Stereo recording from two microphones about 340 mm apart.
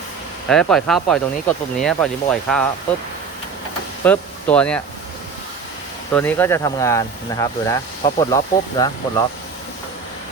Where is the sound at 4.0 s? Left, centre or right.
Centre.